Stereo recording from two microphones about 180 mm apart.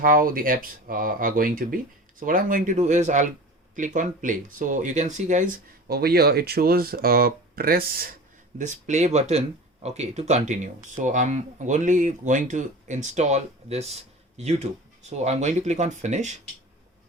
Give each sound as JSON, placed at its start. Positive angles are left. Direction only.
{"t": 0.0, "sound": "speech", "side_deg": -50}
{"t": 5.9, "sound": "speech", "side_deg": -60}
{"t": 8.5, "sound": "speech", "side_deg": -40}